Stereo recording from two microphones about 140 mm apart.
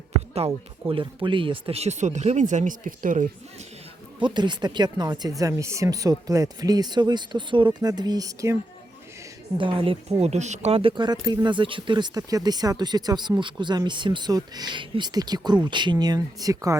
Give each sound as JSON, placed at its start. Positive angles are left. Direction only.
{"t": 0.3, "sound": "speech", "side_deg": -45}
{"t": 4.2, "sound": "speech", "side_deg": -30}
{"t": 9.6, "sound": "speech", "side_deg": -35}
{"t": 10.2, "sound": "speech", "side_deg": -50}